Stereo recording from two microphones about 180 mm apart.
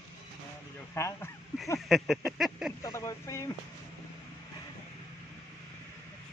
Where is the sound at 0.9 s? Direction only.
15° left (ahead or behind).